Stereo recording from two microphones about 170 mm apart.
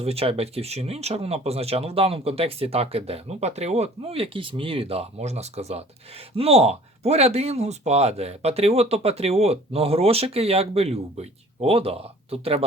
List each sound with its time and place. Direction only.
0.0 s speech: 35° right (ahead or behind)